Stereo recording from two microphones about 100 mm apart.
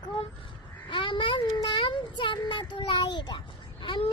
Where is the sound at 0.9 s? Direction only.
55° left (ahead or behind).